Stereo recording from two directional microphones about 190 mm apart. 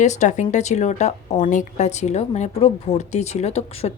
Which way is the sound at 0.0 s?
40° left (ahead or behind).